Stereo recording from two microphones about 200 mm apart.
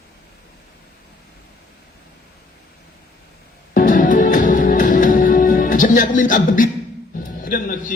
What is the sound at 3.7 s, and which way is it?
Music, 45° left (ahead or behind).